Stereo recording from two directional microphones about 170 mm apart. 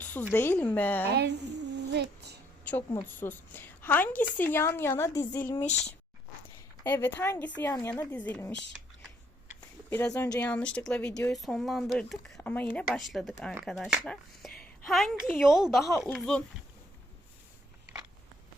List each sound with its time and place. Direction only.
0.0 s a sound: 10° left (ahead or behind)
0.3 s a woman's voice: 10° left (ahead or behind)
1.0 s speech: 80° right
2.6 s a woman's voice: 10° left (ahead or behind)
6.8 s a woman's voice: 10° left (ahead or behind)
9.6 s a sound: 10° left (ahead or behind)
10.1 s speech: 20° left (ahead or behind)
10.4 s a woman's voice: 5° left (ahead or behind)
14.1 s a sound: centre (ahead or behind)
15.5 s speech: centre (ahead or behind)